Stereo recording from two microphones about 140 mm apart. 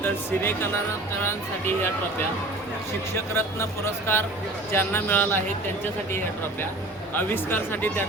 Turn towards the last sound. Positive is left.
turn(degrees=15)  # may be behind; listen again after turning